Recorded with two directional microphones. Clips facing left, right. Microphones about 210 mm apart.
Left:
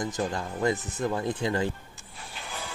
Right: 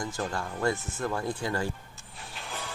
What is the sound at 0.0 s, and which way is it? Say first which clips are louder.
Speech: left 3 dB; 20° left (ahead or behind).